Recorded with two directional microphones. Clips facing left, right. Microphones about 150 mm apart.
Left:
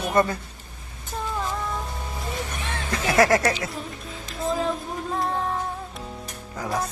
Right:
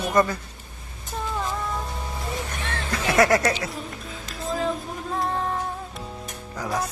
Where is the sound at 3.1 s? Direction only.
30° left (ahead or behind).